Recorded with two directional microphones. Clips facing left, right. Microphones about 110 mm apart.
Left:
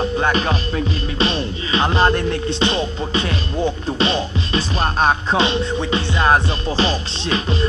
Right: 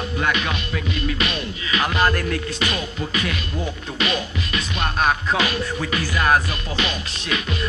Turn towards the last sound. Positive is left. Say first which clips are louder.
# left 5 dB
turn(degrees=30)  # may be behind; listen again after turning